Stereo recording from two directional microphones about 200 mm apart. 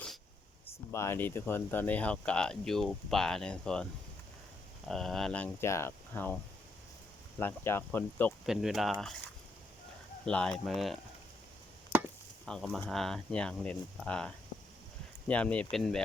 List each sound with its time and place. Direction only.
0.9 s speech: 10° left (ahead or behind)
4.9 s speech: centre (ahead or behind)
7.3 s speech: 10° left (ahead or behind)
8.4 s speech: centre (ahead or behind)
10.2 s speech: 5° left (ahead or behind)
12.5 s speech: 5° left (ahead or behind)